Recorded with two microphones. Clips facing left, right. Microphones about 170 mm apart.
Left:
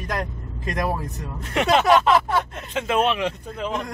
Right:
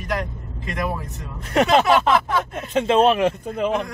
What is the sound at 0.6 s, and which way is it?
Speech, 40° left (ahead or behind).